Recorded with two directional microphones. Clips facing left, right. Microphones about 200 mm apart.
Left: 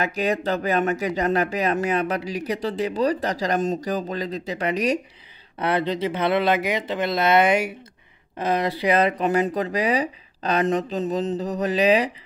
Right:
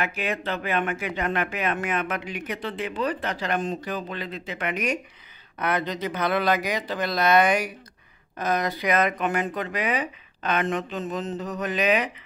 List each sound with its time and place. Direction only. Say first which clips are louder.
0.0 s speech: left 5 dB; 40° left (ahead or behind)